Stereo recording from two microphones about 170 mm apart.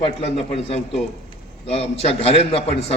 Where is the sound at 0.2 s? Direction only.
35° left (ahead or behind).